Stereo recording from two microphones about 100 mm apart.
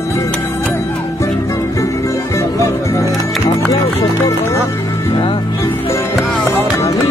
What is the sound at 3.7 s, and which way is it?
Speech, 40° left (ahead or behind).